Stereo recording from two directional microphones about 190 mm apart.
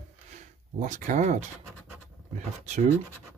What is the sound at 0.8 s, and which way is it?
Speech, 40° right (ahead or behind).